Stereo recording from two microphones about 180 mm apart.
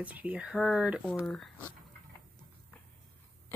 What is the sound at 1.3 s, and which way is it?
Speech, 10° left (ahead or behind).